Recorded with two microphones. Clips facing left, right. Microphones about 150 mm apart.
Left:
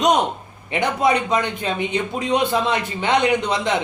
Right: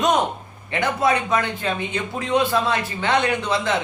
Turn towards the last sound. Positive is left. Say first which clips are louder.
# left 2 dB
turn(degrees=20)  # may be behind; listen again after turning